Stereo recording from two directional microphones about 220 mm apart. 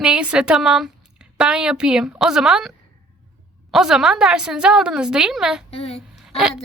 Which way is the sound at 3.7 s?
Centre (ahead or behind).